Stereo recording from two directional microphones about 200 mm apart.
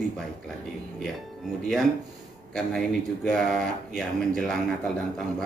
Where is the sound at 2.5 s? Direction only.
Centre (ahead or behind).